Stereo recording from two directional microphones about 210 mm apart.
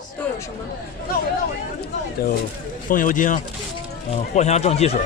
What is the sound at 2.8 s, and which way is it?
Speech, 40° left (ahead or behind).